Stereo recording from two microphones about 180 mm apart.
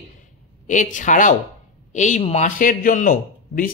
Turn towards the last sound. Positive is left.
turn(degrees=50)  # may be behind; listen again after turning